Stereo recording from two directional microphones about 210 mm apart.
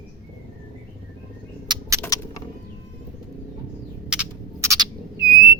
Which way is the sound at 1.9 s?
15° left (ahead or behind).